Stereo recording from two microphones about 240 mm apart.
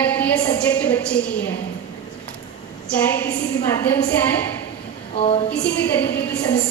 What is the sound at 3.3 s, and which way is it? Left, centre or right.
Speech, left.